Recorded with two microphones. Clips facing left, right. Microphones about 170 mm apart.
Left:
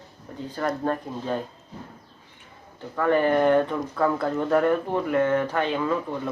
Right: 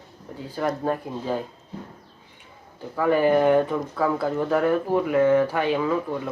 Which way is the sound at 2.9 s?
10° right (ahead or behind).